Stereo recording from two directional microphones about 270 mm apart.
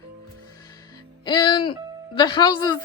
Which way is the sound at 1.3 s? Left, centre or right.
Centre.